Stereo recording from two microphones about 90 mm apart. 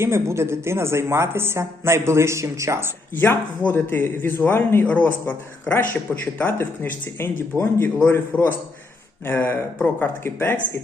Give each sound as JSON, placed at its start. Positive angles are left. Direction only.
{"t": 0.0, "sound": "a woman's voice", "side_deg": -30}
{"t": 3.2, "sound": "a man's voice", "side_deg": 20}